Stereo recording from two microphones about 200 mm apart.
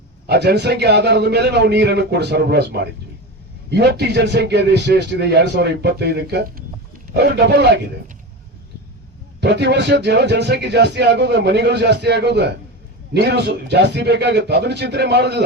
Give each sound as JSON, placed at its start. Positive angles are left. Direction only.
{"t": 0.3, "sound": "speech", "side_deg": -55}
{"t": 9.4, "sound": "speech", "side_deg": -55}